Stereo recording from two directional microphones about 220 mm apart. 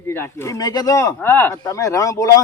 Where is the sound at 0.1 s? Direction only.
10° left (ahead or behind).